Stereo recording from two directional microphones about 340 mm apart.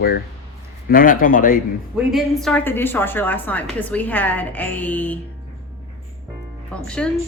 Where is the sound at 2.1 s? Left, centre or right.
Centre.